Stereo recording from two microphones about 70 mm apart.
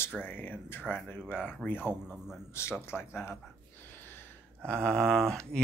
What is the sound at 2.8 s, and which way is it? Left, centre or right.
Speech, left.